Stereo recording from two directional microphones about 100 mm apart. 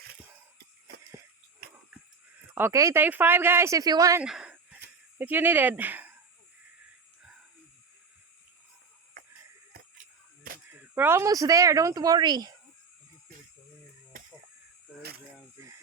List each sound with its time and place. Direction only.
2.6 s speech: 25° right (ahead or behind)
4.2 s a sound: 10° right (ahead or behind)
10.9 s speech: 20° right (ahead or behind); by 12.5 s 45° right (ahead or behind)